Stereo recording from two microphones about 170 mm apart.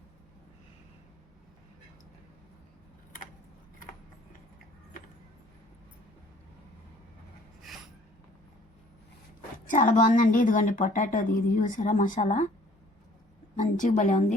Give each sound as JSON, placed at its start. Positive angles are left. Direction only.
{"t": 7.7, "sound": "a sound", "side_deg": 0}
{"t": 9.6, "sound": "a woman's voice", "side_deg": 50}
{"t": 13.6, "sound": "a woman's voice", "side_deg": 45}